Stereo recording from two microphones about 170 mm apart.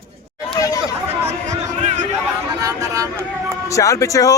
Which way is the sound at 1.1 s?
40° right (ahead or behind).